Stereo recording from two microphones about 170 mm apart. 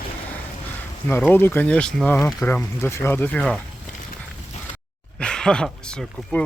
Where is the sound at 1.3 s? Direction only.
10° left (ahead or behind).